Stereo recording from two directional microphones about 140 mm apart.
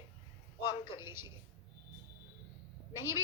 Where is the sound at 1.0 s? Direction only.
15° right (ahead or behind).